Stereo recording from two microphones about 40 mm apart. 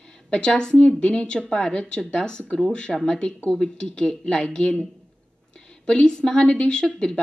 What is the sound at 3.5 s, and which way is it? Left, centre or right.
A woman's voice, left.